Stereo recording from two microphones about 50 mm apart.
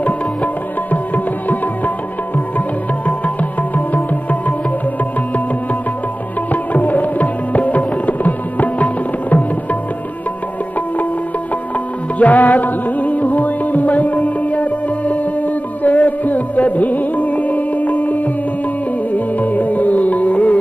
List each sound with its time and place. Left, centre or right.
3.7 s music: left
6.5 s tabla: left
12.2 s music: left